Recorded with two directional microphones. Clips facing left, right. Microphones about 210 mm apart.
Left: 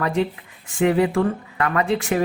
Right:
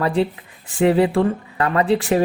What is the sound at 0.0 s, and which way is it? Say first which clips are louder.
Speech: right 2 dB; 35° right (ahead or behind).